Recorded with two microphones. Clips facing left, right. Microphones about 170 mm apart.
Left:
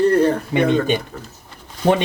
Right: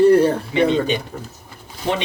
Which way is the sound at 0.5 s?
50° left (ahead or behind).